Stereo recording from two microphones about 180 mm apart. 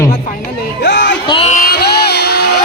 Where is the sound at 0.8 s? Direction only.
75° left (ahead or behind).